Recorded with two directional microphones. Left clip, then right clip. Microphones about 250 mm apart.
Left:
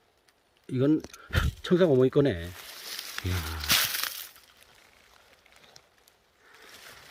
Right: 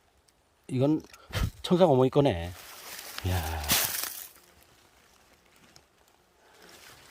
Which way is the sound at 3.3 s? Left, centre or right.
Centre.